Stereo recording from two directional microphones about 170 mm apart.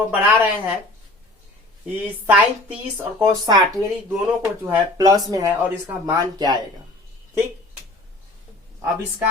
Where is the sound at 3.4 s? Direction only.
25° right (ahead or behind).